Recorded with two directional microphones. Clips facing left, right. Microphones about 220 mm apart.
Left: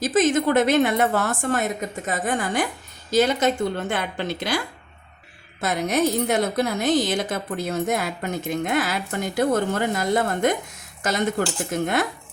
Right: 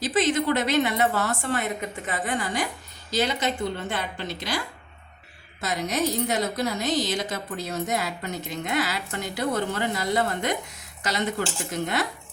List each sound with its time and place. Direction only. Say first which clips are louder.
0.0 s a woman's voice: left 4 dB; 45° left (ahead or behind)